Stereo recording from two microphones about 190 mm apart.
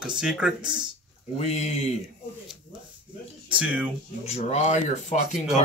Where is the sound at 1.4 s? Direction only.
35° left (ahead or behind).